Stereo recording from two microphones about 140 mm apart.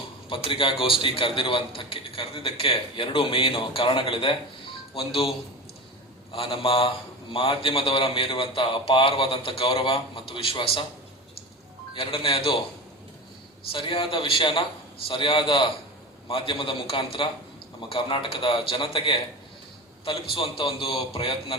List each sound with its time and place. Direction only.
0.3 s a man's voice: 40° left (ahead or behind)
6.3 s a man's voice: 40° left (ahead or behind)
11.9 s a man's voice: 40° left (ahead or behind)
13.7 s a man's voice: 40° left (ahead or behind)